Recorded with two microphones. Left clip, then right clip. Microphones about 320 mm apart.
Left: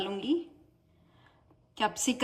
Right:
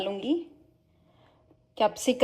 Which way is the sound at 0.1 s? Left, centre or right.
Centre.